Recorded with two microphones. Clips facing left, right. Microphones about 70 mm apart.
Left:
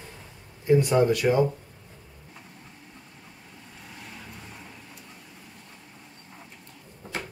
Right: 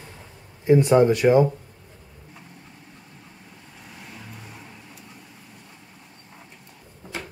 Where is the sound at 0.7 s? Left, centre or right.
Right.